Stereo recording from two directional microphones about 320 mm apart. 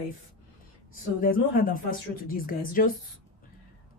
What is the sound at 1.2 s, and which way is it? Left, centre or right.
A woman's voice, left.